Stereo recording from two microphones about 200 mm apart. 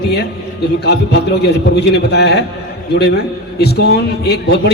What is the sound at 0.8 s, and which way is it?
A man's voice, 55° left (ahead or behind).